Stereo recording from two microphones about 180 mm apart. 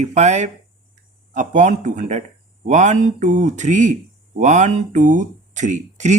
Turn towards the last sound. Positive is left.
turn(degrees=-40)  # may be behind; listen again after turning